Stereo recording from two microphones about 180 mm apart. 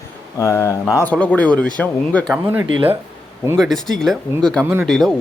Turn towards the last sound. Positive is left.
turn(degrees=0)  # may be behind; listen again after turning